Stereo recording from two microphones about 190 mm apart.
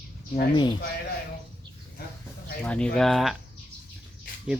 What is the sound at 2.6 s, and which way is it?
Speech, 5° left (ahead or behind).